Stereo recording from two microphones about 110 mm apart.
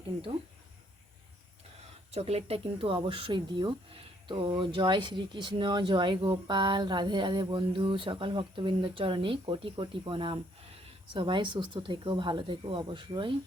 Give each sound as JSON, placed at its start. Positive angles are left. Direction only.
{"t": 2.1, "sound": "speech", "side_deg": -70}